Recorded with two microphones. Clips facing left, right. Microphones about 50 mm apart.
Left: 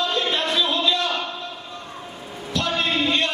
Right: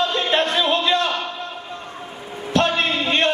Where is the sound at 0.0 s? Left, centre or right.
Right.